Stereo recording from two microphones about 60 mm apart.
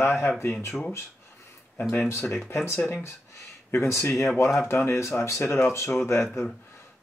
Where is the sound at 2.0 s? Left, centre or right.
Left.